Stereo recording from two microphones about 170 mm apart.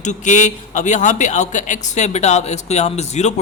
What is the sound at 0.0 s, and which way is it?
Speech, 45° left (ahead or behind).